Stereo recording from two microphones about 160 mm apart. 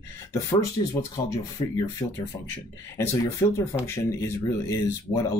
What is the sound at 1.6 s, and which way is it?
Speech, 30° left (ahead or behind).